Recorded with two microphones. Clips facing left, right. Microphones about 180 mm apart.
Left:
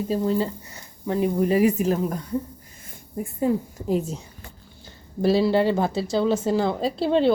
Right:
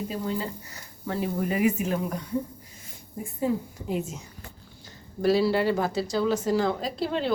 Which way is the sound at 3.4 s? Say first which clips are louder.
Left 4 dB; 40° left (ahead or behind).